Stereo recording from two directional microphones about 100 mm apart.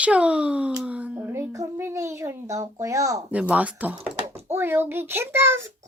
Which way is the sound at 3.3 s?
10° right (ahead or behind).